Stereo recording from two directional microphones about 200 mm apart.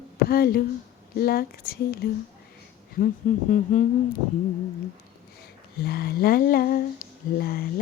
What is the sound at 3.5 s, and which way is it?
Humming, 40° left (ahead or behind).